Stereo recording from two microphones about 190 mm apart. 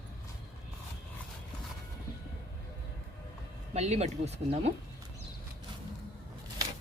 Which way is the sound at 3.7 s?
35° right (ahead or behind).